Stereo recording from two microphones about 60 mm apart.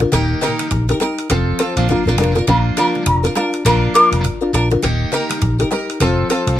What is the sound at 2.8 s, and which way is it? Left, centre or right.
Music, centre.